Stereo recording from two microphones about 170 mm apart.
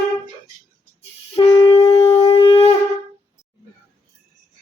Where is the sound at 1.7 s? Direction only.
35° left (ahead or behind).